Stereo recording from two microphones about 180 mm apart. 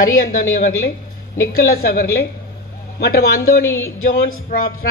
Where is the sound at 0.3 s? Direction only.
50° left (ahead or behind).